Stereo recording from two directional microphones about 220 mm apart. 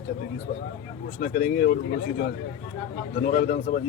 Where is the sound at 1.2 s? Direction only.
40° left (ahead or behind).